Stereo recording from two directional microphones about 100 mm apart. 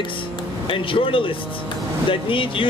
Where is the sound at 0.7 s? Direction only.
60° left (ahead or behind).